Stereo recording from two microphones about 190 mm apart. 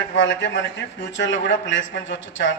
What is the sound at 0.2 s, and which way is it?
A man's voice, 70° left (ahead or behind).